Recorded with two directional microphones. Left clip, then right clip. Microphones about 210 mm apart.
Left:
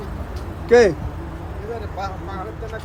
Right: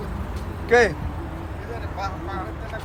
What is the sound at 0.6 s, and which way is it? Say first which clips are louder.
Speech: left 4 dB; 25° left (ahead or behind).